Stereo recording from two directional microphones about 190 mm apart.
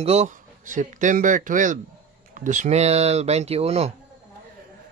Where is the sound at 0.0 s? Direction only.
35° right (ahead or behind).